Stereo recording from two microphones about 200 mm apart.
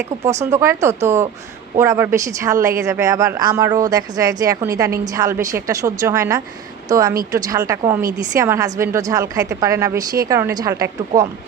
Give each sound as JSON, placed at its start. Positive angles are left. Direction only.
{"t": 0.5, "sound": "a woman's voice", "side_deg": -15}